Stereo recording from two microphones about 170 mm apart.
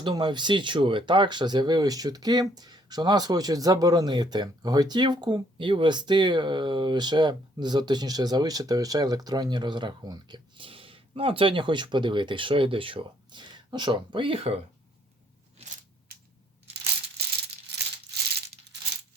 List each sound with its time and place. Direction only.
0.0 s speech: 25° right (ahead or behind)
17.7 s rattle: 80° right